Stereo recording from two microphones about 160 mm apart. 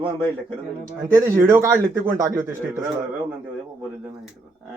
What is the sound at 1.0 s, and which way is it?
A man's voice, 15° right (ahead or behind).